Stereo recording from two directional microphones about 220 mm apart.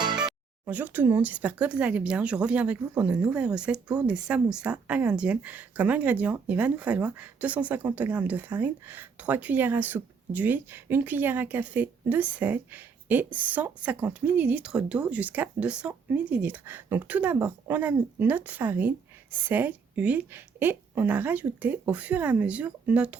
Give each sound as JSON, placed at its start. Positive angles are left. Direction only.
{"t": 0.0, "sound": "music", "side_deg": -20}
{"t": 0.6, "sound": "speech", "side_deg": -10}